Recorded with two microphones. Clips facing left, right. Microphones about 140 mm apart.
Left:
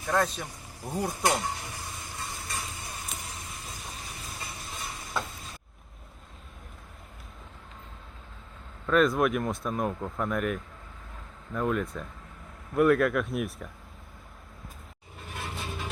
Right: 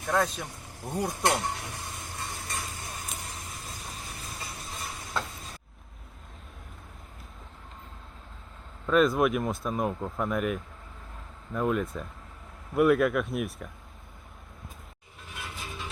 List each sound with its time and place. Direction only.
0.0 s speech: centre (ahead or behind)
1.9 s a sound: centre (ahead or behind)
8.9 s speech: centre (ahead or behind)
15.4 s vehicle: 60° left (ahead or behind)